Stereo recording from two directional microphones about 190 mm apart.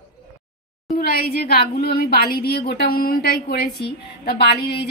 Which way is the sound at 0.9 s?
55° left (ahead or behind).